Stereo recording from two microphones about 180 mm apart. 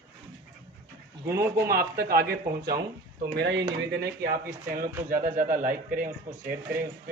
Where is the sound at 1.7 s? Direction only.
55° right (ahead or behind).